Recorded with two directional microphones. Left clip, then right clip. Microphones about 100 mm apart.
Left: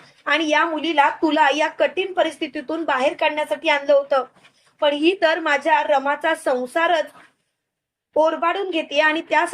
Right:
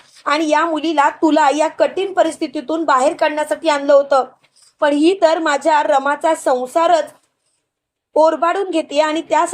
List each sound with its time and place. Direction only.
0.3 s speech: 40° right (ahead or behind); by 1.1 s 55° right (ahead or behind)
1.2 s a woman's voice: 40° right (ahead or behind)
2.0 s a woman's voice: 50° right (ahead or behind)
3.2 s speech: 50° right (ahead or behind)
3.9 s a woman's voice: 35° right (ahead or behind); by 6.3 s 55° right (ahead or behind)
6.4 s a woman's voice: 35° right (ahead or behind)
8.1 s speech: 45° right (ahead or behind)
9.1 s a woman's voice: 30° right (ahead or behind)